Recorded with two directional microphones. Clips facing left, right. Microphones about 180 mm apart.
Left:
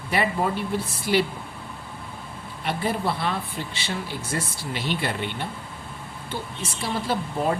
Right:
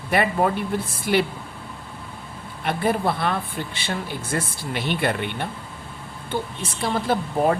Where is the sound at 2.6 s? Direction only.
55° right (ahead or behind).